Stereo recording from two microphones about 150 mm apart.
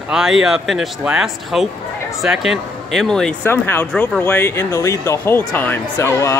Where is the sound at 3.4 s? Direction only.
15° left (ahead or behind).